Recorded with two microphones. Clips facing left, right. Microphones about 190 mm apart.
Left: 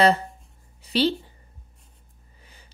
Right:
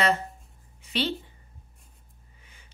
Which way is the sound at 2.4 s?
35° left (ahead or behind).